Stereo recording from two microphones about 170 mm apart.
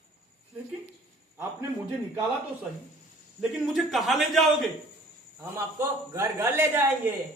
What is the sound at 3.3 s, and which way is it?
A man's voice, 5° right (ahead or behind).